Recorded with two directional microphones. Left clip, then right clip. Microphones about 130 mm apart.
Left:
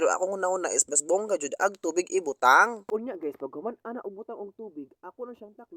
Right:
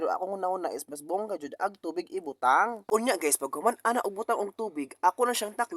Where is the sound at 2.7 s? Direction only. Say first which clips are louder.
Right 5 dB; 5° left (ahead or behind).